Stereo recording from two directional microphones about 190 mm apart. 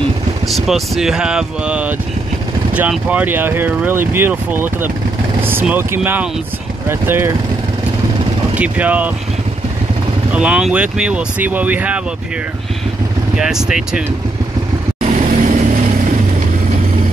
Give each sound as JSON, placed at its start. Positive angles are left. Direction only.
{"t": 0.5, "sound": "speech", "side_deg": 0}
{"t": 8.5, "sound": "speech", "side_deg": -10}
{"t": 10.3, "sound": "speech", "side_deg": -5}
{"t": 13.4, "sound": "speech", "side_deg": -5}
{"t": 15.0, "sound": "vehicle", "side_deg": -40}